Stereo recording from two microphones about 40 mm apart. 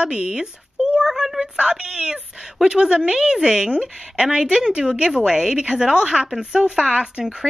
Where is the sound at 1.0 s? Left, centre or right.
Centre.